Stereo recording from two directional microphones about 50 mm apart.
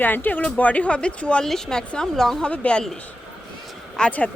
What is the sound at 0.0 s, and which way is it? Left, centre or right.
Speech, left.